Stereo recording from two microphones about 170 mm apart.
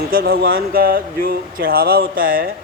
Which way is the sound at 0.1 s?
60° right (ahead or behind).